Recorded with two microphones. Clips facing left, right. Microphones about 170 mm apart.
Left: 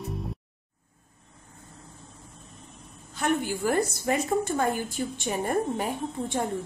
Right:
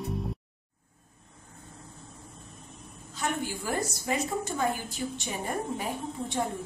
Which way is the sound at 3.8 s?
55° left (ahead or behind).